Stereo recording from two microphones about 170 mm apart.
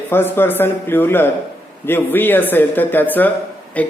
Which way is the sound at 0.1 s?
15° left (ahead or behind).